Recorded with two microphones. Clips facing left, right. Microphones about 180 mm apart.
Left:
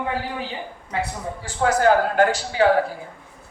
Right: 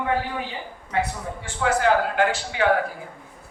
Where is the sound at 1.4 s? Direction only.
40° left (ahead or behind).